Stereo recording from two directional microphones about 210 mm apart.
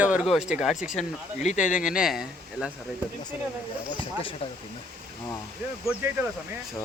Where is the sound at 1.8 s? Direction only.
5° right (ahead or behind).